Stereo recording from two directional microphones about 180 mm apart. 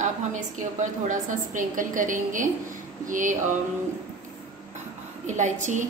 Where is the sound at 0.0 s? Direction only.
45° right (ahead or behind).